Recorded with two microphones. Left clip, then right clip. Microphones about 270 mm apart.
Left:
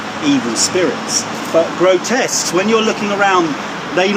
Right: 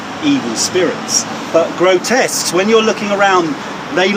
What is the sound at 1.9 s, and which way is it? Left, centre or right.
Speech, centre.